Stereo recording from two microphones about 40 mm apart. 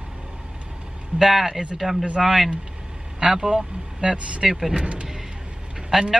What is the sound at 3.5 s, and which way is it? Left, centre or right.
Speech, right.